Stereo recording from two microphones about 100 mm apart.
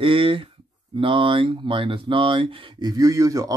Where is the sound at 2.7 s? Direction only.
40° right (ahead or behind).